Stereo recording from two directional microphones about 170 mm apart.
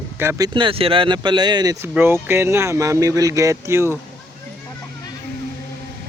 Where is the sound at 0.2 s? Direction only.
20° right (ahead or behind).